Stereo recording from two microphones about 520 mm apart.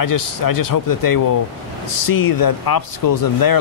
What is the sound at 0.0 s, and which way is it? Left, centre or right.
Speech, left.